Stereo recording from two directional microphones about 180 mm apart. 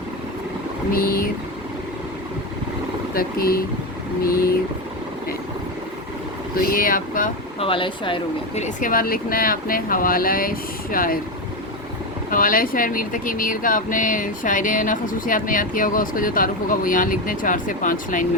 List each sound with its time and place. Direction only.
0.9 s speech: 55° left (ahead or behind)
3.2 s speech: 55° left (ahead or behind)
6.7 s speech: 50° left (ahead or behind)
7.6 s speech: 30° left (ahead or behind); by 11.2 s 50° left (ahead or behind)
12.3 s speech: 50° left (ahead or behind)